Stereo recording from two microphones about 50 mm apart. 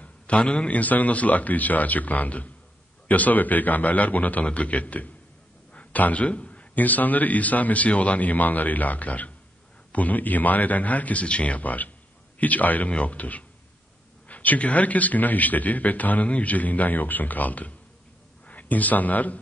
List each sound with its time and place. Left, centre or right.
0.0 s a man's voice: left